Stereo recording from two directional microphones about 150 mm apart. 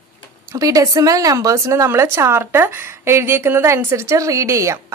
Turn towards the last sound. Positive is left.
turn(degrees=-20)  # may be behind; listen again after turning